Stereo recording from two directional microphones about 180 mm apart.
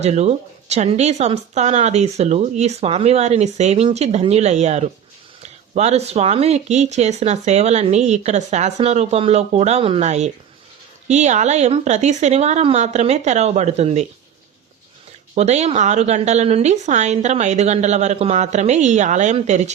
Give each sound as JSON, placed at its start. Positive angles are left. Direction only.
{"t": 0.0, "sound": "speech", "side_deg": -35}
{"t": 15.4, "sound": "speech", "side_deg": -35}